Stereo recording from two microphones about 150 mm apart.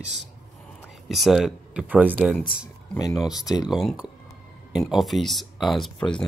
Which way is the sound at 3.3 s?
25° left (ahead or behind).